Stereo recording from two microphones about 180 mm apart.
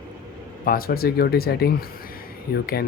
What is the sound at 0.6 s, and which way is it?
Speech, 55° left (ahead or behind).